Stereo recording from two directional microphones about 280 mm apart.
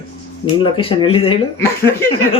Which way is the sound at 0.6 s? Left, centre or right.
Centre.